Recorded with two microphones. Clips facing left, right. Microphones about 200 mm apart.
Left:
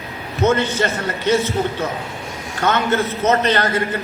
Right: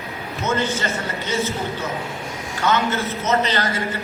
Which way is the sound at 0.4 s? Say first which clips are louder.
Left 6 dB; 65° left (ahead or behind).